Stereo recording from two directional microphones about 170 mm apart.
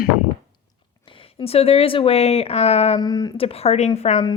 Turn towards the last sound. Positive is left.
turn(degrees=40)  # may be behind; listen again after turning